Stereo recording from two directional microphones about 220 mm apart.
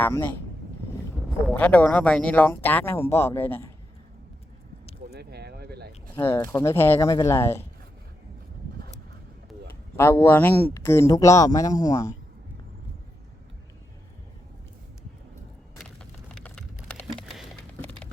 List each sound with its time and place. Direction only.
0.0 s speech: 10° left (ahead or behind)
1.5 s speech: 5° left (ahead or behind)
5.1 s a sound: 50° right (ahead or behind)
6.1 s speech: 10° left (ahead or behind)
10.0 s speech: 10° left (ahead or behind)
15.8 s a sound: 5° left (ahead or behind)